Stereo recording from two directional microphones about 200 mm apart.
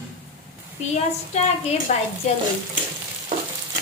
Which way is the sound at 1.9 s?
35° left (ahead or behind).